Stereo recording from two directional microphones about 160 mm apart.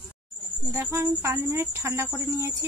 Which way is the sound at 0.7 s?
20° right (ahead or behind).